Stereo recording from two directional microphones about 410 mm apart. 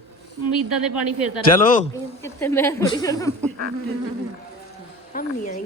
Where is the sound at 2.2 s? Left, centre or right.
Centre.